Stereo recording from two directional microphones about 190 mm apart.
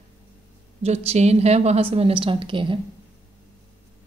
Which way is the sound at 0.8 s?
35° right (ahead or behind).